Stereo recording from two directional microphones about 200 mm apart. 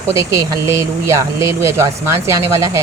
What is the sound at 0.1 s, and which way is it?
Speech, 15° right (ahead or behind).